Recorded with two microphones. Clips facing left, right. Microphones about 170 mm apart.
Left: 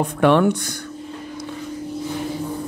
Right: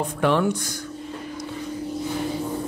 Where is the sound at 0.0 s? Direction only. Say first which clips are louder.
Left 5 dB; 65° left (ahead or behind).